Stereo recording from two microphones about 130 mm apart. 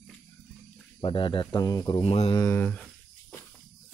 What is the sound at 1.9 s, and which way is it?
Mantra, 50° left (ahead or behind).